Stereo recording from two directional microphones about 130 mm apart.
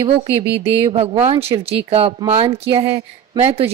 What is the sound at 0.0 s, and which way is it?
A woman's voice, 50° right (ahead or behind).